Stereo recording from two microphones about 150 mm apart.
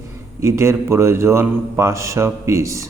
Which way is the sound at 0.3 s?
20° right (ahead or behind).